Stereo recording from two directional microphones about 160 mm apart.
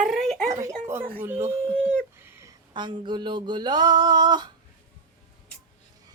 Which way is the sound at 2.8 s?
30° right (ahead or behind).